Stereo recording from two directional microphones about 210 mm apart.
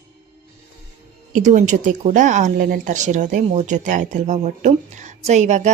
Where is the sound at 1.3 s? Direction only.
35° right (ahead or behind).